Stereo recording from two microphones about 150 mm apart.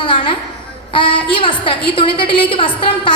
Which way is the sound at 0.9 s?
35° left (ahead or behind).